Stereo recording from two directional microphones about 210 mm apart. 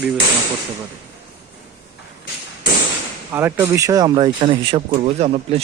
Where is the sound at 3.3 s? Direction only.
10° right (ahead or behind).